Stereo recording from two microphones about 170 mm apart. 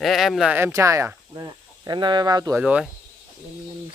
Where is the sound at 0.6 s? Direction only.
15° right (ahead or behind).